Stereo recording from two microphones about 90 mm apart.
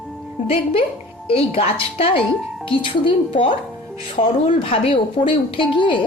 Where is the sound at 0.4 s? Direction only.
90° left.